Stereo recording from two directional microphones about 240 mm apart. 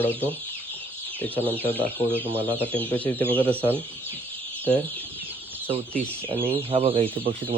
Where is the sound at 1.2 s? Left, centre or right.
Centre.